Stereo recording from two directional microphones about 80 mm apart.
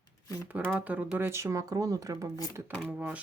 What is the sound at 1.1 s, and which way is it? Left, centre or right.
Speech, right.